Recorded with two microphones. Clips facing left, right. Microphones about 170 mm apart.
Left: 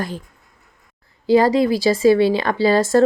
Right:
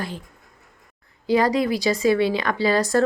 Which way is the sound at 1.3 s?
30° left (ahead or behind).